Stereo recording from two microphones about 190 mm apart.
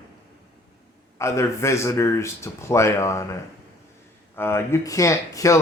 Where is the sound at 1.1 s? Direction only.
15° left (ahead or behind).